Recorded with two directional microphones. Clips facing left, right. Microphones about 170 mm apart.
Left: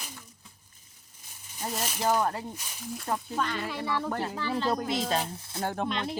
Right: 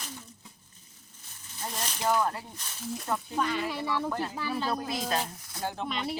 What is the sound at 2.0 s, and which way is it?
Speech, 30° left (ahead or behind).